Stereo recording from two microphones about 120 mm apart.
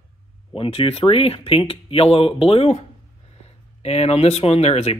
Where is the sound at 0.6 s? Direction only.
55° left (ahead or behind).